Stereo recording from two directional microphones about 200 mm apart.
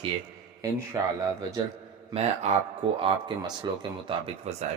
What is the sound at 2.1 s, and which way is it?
A man's voice, 30° right (ahead or behind).